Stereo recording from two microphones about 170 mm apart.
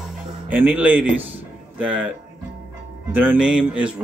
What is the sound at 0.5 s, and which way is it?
Speech, 10° right (ahead or behind).